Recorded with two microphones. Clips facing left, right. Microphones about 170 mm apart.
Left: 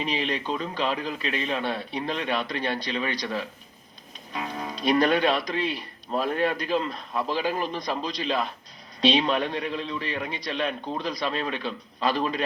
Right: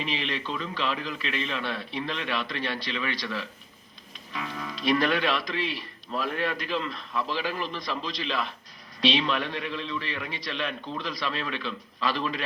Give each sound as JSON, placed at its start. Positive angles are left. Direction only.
{"t": 0.0, "sound": "a man's voice", "side_deg": 45}
{"t": 4.4, "sound": "a man's voice", "side_deg": 45}